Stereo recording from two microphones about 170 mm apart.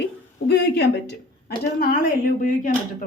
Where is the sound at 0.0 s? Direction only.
75° left (ahead or behind); by 2.7 s 55° left (ahead or behind).